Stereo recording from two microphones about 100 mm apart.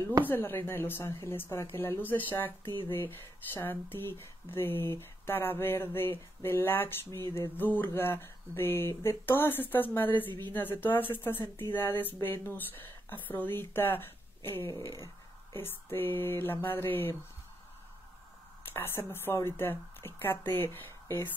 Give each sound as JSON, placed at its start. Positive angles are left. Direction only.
{"t": 0.2, "sound": "speech", "side_deg": 20}
{"t": 15.5, "sound": "speech", "side_deg": 25}
{"t": 18.7, "sound": "a woman's voice", "side_deg": 25}